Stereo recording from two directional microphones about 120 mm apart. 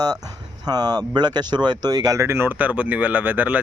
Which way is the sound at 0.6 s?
35° right (ahead or behind).